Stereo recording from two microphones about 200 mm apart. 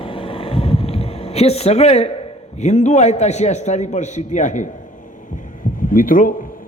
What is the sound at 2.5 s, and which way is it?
A man's voice, 35° left (ahead or behind).